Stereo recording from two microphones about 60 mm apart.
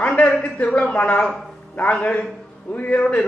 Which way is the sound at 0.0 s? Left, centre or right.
Left.